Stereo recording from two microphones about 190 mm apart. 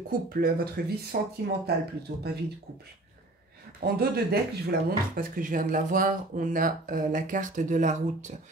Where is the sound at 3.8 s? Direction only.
55° right (ahead or behind).